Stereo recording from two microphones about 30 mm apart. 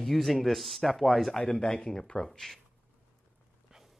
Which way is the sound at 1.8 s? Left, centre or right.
Left.